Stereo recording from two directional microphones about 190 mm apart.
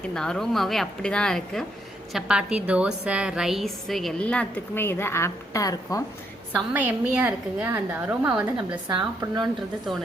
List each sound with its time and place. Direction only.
0.1 s a woman's voice: 5° left (ahead or behind)
6.5 s a woman's voice: 10° right (ahead or behind)
8.9 s speech: 25° right (ahead or behind)